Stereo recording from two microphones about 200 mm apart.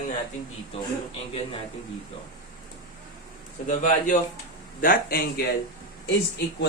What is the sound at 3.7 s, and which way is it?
A man's voice, 40° left (ahead or behind).